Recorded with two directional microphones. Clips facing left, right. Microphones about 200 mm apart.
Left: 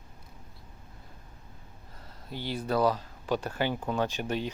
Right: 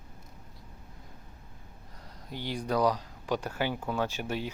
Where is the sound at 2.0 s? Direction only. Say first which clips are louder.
Left 1 dB; 15° right (ahead or behind).